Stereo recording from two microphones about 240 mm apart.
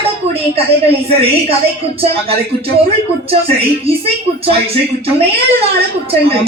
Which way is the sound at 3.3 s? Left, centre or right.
Right.